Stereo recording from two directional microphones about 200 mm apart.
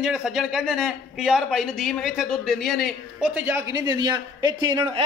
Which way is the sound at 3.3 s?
10° right (ahead or behind).